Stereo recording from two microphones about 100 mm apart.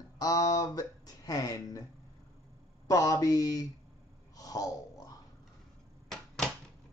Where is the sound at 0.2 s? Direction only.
40° left (ahead or behind).